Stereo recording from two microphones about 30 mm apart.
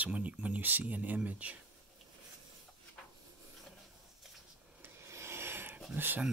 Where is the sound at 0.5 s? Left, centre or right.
Right.